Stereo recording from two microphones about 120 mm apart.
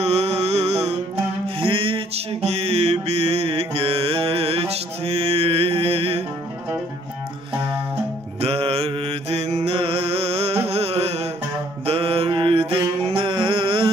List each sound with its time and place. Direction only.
0.0 s music: 60° right (ahead or behind)
1.6 s mantra: 50° right (ahead or behind)
8.4 s mantra: 55° right (ahead or behind)
12.3 s music: 45° right (ahead or behind)